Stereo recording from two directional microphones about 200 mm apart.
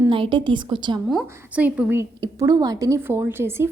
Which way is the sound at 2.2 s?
20° right (ahead or behind).